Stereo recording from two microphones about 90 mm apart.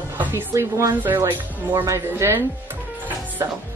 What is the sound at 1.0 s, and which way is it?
A woman's voice, 25° right (ahead or behind).